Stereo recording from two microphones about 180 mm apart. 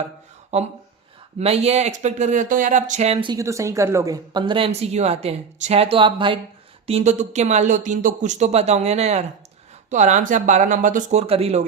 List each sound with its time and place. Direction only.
0.5 s speech: 35° right (ahead or behind)